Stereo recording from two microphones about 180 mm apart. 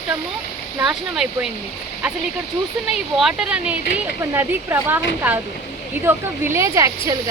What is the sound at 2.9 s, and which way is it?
Speech, 5° right (ahead or behind).